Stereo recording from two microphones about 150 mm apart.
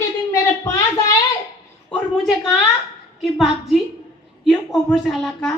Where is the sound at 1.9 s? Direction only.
Centre (ahead or behind).